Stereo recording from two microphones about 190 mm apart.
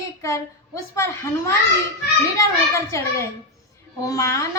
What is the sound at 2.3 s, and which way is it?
Speech, 15° left (ahead or behind).